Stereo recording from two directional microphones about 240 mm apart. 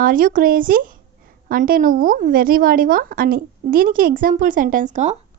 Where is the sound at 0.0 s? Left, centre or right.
Right.